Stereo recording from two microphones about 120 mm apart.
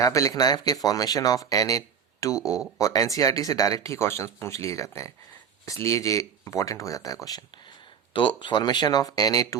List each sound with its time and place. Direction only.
0.0 s speech: 25° left (ahead or behind)